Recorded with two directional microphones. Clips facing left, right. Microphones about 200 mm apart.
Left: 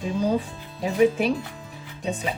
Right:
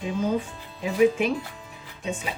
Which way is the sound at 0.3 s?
35° left (ahead or behind).